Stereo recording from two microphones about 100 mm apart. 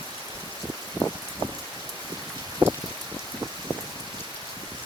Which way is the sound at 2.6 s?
50° right (ahead or behind).